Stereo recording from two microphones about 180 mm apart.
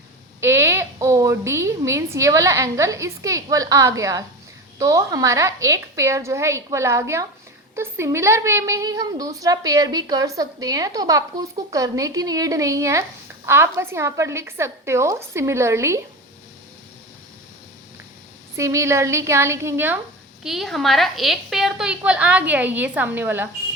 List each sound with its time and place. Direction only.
0.4 s a woman's voice: 15° right (ahead or behind)
18.5 s a woman's voice: 15° right (ahead or behind)
20.4 s a woman's voice: centre (ahead or behind)